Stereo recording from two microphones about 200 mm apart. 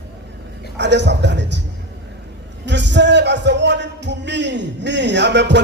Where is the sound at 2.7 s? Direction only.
60° right (ahead or behind).